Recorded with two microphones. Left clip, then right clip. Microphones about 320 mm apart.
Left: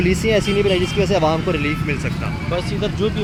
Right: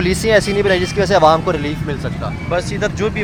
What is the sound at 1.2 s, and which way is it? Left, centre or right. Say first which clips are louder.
Speech: right 6 dB; right.